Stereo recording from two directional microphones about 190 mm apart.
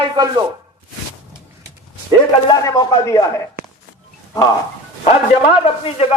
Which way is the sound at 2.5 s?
20° left (ahead or behind).